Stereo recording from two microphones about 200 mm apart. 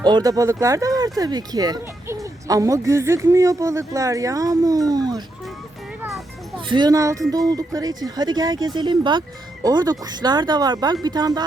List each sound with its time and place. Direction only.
0.0 s speech: 20° right (ahead or behind)
6.7 s speech: 20° right (ahead or behind)